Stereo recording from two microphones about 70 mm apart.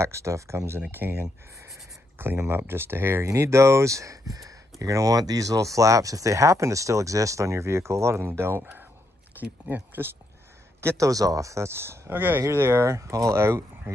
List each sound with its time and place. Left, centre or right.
0.0 s speech: right
3.3 s speech: right
10.8 s speech: right
11.1 s speech: right
12.4 s speech: right